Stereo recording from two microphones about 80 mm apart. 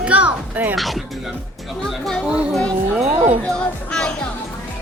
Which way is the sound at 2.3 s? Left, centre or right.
Centre.